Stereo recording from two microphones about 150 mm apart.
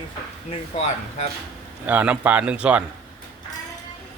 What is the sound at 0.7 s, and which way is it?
Speech, 45° left (ahead or behind).